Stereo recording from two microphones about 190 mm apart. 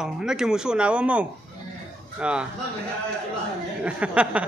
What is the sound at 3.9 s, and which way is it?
Speech, 5° right (ahead or behind).